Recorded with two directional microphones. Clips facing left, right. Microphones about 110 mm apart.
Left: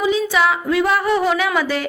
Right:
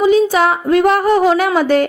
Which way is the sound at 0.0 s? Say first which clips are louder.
Right 6 dB; 45° right (ahead or behind).